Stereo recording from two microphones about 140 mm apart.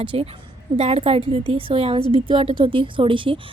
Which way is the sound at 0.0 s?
40° right (ahead or behind).